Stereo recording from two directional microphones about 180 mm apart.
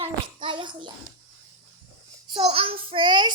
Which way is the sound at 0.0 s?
25° right (ahead or behind).